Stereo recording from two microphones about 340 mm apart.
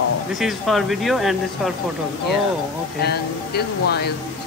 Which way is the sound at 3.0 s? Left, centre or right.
Left.